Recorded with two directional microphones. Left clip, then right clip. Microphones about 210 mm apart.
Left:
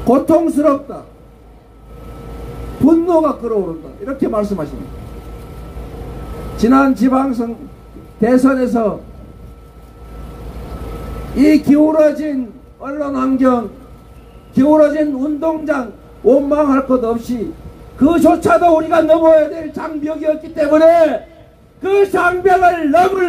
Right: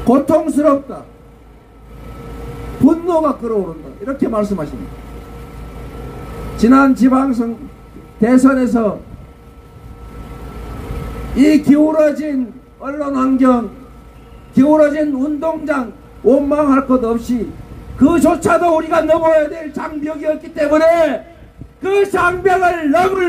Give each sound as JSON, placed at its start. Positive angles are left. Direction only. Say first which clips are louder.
{"t": 0.0, "sound": "a man's voice", "louder": "left 1 dB", "side_deg": -20}
{"t": 2.8, "sound": "a man's voice", "louder": "left 2 dB", "side_deg": -20}
{"t": 6.3, "sound": "a man's voice", "louder": "right 1 dB", "side_deg": -20}
{"t": 10.9, "sound": "a man's voice", "louder": "right 1 dB", "side_deg": -15}